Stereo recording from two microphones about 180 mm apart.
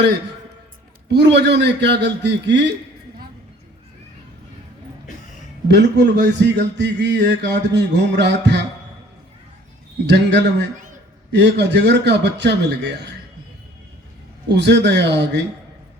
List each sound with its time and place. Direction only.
1.0 s a man's voice: 70° right (ahead or behind)
5.6 s a man's voice: 70° right (ahead or behind)
10.1 s a man's voice: 75° right (ahead or behind)
14.5 s a man's voice: 75° right (ahead or behind)